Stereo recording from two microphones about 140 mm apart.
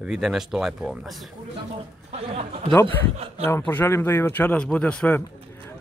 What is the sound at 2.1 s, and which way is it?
Speech, 45° right (ahead or behind).